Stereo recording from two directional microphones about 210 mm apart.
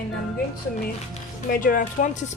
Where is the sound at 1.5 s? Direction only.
40° left (ahead or behind).